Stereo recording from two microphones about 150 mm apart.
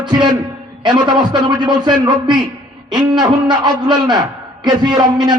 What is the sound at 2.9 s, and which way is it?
A man's voice, 30° right (ahead or behind).